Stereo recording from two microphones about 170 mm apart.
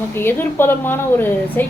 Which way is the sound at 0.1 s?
15° left (ahead or behind).